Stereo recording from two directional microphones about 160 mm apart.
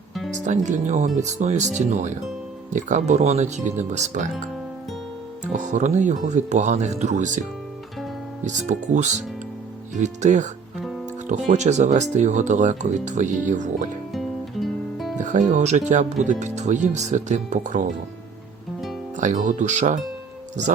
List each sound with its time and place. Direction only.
0.3 s speech: 50° right (ahead or behind)
5.5 s speech: 50° right (ahead or behind)
8.4 s speech: 50° right (ahead or behind)
14.1 s music: centre (ahead or behind)
15.2 s speech: 50° right (ahead or behind)
19.1 s speech: 50° right (ahead or behind)